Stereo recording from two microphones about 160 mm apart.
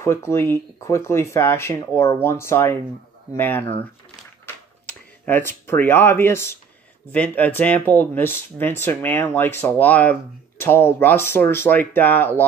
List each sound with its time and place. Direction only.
0.0 s speech: 15° left (ahead or behind)
4.8 s speech: 10° left (ahead or behind)